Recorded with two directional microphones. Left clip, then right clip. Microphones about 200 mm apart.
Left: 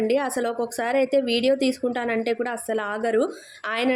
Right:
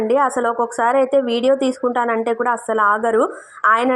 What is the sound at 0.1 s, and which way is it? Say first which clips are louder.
A woman's voice: right 7 dB; centre (ahead or behind).